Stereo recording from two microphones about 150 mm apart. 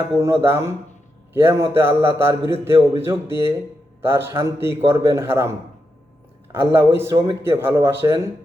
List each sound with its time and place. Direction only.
0.0 s a man's voice: 15° right (ahead or behind)
6.7 s a man's voice: 15° right (ahead or behind)